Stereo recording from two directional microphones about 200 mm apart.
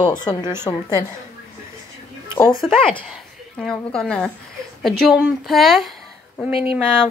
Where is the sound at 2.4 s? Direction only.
25° left (ahead or behind).